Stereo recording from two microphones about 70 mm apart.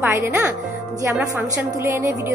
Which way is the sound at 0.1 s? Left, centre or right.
Right.